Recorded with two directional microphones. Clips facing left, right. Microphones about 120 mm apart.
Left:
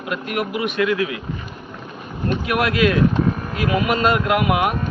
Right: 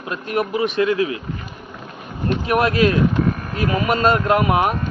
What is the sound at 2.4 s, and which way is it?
Speech, 35° right (ahead or behind).